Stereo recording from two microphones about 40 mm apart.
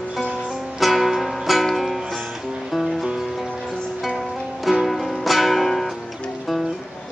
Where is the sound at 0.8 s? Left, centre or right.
Centre.